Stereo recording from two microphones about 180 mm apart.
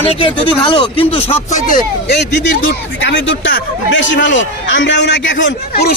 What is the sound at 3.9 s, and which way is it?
A man's voice, 90° left.